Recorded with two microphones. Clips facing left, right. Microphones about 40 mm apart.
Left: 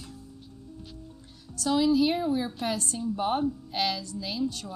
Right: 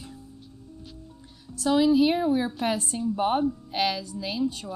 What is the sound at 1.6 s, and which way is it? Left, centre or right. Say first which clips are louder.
A woman's voice: right 3 dB; centre.